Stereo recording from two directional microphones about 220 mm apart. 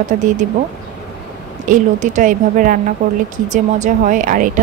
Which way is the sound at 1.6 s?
35° right (ahead or behind).